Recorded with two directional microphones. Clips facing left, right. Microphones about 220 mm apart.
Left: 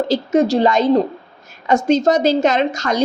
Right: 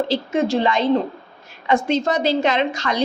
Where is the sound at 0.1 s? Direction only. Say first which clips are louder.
Left 5 dB; 40° left (ahead or behind).